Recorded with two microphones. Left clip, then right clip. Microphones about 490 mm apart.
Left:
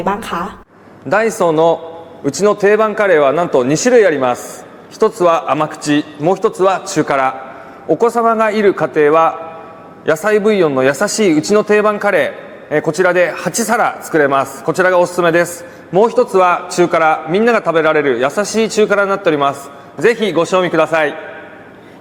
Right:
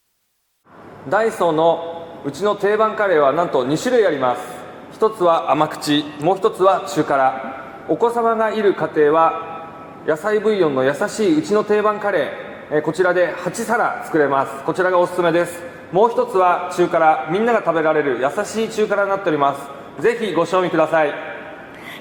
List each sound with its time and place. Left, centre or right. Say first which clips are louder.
1.1 s a man's voice: left 4 dB; left